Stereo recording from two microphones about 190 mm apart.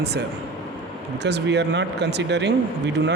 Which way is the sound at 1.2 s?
65° right (ahead or behind).